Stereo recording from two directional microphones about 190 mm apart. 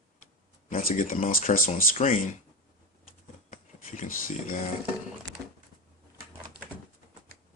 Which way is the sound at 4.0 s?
45° left (ahead or behind).